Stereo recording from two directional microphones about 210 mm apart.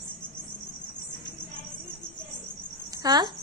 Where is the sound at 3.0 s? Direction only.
20° right (ahead or behind).